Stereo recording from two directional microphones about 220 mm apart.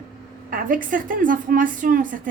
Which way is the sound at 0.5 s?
40° right (ahead or behind).